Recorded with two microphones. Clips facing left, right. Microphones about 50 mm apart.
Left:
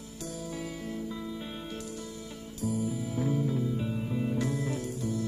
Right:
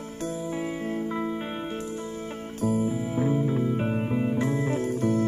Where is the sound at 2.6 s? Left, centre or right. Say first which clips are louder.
Right 6 dB; right.